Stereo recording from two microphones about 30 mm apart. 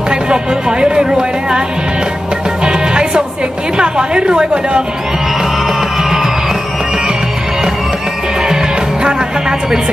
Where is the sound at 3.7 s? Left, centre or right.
Right.